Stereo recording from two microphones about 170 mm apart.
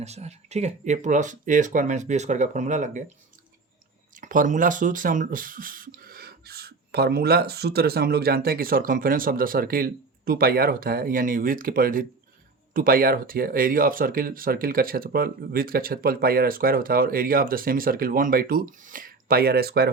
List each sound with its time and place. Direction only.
0.0 s speech: 40° right (ahead or behind)
4.1 s speech: 50° right (ahead or behind); by 19.9 s 70° right (ahead or behind)